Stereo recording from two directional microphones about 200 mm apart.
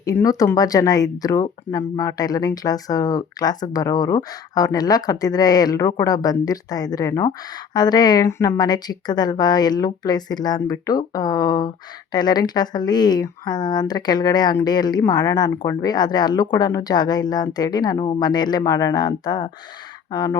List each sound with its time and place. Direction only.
0.0 s speech: 15° left (ahead or behind)